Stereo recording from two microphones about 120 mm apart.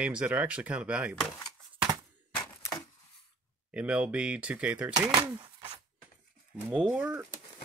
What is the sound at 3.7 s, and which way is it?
Speech, 10° right (ahead or behind).